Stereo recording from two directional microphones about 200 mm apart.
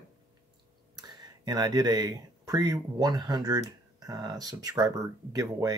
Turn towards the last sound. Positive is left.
turn(degrees=-20)  # may be behind; listen again after turning